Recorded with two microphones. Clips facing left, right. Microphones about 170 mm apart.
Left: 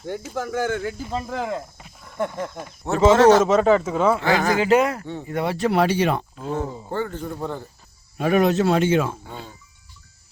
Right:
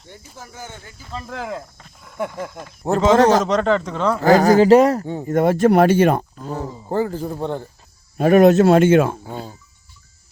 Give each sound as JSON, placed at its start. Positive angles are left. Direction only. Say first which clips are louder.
{"t": 0.1, "sound": "speech", "louder": "left 14 dB", "side_deg": 80}
{"t": 1.3, "sound": "speech", "louder": "left 2 dB", "side_deg": 0}
{"t": 2.8, "sound": "speech", "louder": "right 5 dB", "side_deg": -35}
{"t": 3.4, "sound": "speech", "louder": "left 1 dB", "side_deg": 5}
{"t": 4.2, "sound": "speech", "louder": "right 8 dB", "side_deg": -40}
{"t": 8.2, "sound": "speech", "louder": "right 7 dB", "side_deg": -50}
{"t": 9.2, "sound": "speech", "louder": "right 6 dB", "side_deg": -40}